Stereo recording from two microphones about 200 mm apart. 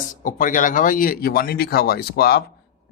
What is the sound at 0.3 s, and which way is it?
A man's voice, 40° left (ahead or behind).